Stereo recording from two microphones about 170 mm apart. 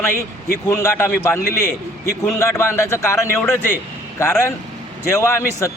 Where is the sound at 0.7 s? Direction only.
15° left (ahead or behind).